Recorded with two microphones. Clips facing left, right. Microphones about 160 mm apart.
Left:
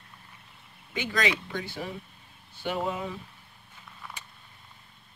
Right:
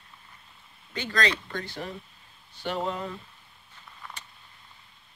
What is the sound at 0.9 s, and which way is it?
Speech, 10° left (ahead or behind).